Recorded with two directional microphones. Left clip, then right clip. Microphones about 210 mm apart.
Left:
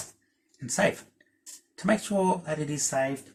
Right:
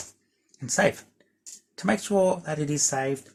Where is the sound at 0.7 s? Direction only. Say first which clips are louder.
Right 3 dB; 55° right (ahead or behind).